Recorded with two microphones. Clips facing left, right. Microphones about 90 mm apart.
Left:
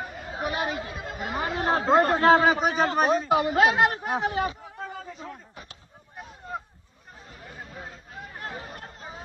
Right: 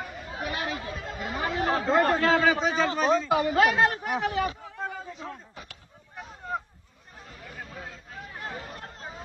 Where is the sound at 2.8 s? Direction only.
60° left (ahead or behind).